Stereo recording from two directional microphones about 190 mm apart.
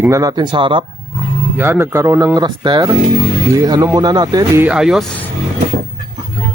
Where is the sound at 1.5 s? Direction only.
10° right (ahead or behind).